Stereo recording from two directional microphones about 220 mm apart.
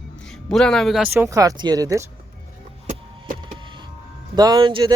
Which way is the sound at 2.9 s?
30° right (ahead or behind).